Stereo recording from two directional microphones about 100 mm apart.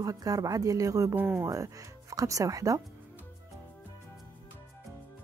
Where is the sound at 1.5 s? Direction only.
35° right (ahead or behind).